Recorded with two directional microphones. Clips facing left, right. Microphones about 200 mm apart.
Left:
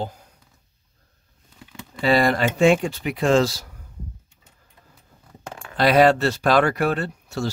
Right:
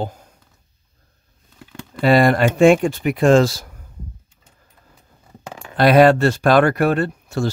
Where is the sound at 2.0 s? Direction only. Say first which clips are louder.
Right 5 dB; 55° right (ahead or behind).